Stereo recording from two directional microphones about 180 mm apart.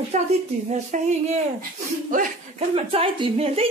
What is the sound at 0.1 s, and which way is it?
Speech, 35° right (ahead or behind).